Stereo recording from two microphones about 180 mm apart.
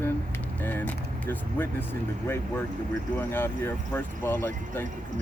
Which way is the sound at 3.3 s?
10° left (ahead or behind).